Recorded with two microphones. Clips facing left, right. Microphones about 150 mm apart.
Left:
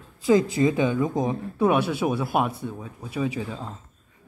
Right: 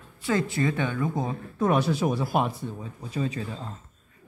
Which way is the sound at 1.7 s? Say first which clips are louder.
Even; 5° left (ahead or behind).